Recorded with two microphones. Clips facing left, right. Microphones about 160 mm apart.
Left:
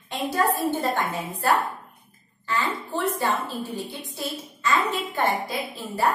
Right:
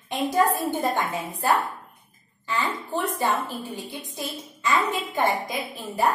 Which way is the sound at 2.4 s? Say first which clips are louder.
Left 1 dB; 15° right (ahead or behind).